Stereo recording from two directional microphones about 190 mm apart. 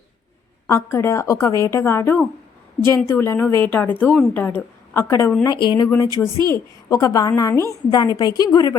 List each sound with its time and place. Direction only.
0.7 s a woman's voice: 15° left (ahead or behind)
6.2 s a woman's voice: 5° left (ahead or behind)
6.5 s a woman's voice: 15° left (ahead or behind)